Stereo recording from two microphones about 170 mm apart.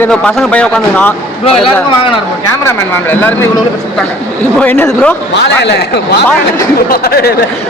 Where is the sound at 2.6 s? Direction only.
10° left (ahead or behind).